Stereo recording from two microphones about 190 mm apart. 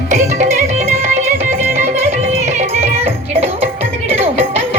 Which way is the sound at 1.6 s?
15° right (ahead or behind).